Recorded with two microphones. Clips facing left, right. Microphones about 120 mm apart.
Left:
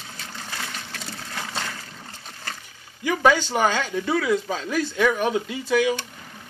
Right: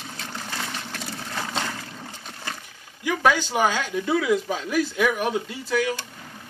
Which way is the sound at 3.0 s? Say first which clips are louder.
Left 2 dB; 5° right (ahead or behind).